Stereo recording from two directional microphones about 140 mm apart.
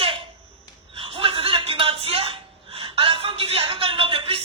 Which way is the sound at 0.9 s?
40° right (ahead or behind).